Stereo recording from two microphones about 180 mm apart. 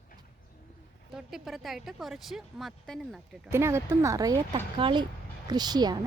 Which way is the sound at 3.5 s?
15° right (ahead or behind).